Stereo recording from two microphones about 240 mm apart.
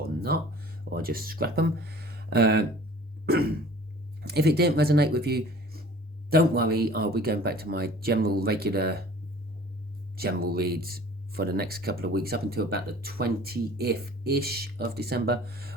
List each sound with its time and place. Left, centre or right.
0.9 s speech: right
10.2 s speech: right